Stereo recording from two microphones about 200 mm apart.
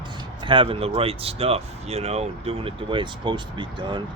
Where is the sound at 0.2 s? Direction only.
25° right (ahead or behind).